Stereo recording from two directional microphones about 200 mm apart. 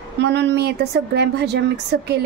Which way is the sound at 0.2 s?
60° right (ahead or behind).